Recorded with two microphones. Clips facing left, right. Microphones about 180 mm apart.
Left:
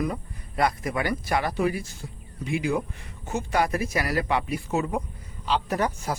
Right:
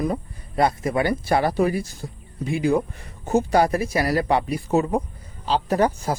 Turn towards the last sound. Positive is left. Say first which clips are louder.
# right 6 dB
turn(degrees=-35)  # may be behind; listen again after turning